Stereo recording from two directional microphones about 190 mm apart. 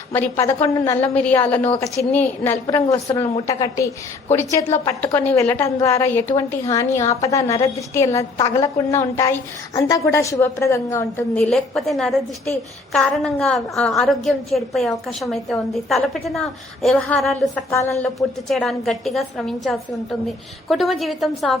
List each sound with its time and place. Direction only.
0.1 s a woman's voice: 10° left (ahead or behind)
17.7 s a woman's voice: 15° left (ahead or behind)
18.4 s a woman's voice: centre (ahead or behind)